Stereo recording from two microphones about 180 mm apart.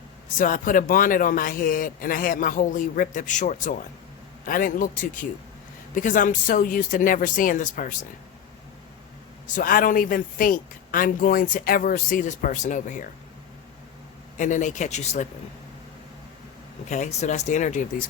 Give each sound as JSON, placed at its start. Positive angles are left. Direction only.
{"t": 0.3, "sound": "speech", "side_deg": 50}
{"t": 9.5, "sound": "speech", "side_deg": 50}
{"t": 14.3, "sound": "speech", "side_deg": 45}
{"t": 16.9, "sound": "speech", "side_deg": 40}